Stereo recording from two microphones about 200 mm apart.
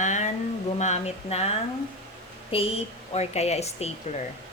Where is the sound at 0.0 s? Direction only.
35° left (ahead or behind).